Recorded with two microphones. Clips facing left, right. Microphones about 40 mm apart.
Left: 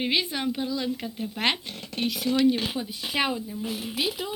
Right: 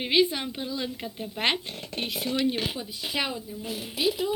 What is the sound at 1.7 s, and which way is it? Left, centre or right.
Speech, right.